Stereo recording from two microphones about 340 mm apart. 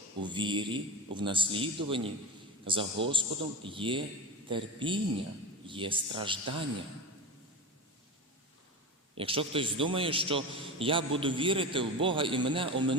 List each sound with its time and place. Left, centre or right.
0.2 s a man's voice: centre
9.1 s a man's voice: centre